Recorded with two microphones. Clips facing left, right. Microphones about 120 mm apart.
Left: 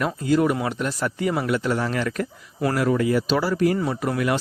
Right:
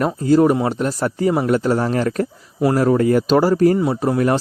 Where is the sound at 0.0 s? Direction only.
40° right (ahead or behind).